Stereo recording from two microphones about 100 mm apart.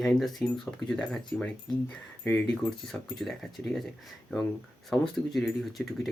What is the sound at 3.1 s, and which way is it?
Speech, 5° left (ahead or behind).